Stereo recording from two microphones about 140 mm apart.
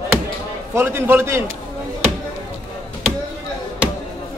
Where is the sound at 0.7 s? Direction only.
15° right (ahead or behind).